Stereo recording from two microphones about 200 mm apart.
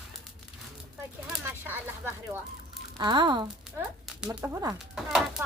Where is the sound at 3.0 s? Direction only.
20° right (ahead or behind).